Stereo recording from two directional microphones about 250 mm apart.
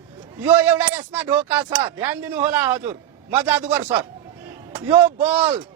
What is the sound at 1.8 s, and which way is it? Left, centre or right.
A man's voice, centre.